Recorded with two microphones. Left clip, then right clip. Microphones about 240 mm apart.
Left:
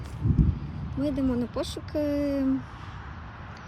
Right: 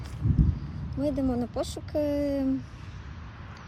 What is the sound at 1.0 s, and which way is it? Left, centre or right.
Speech, centre.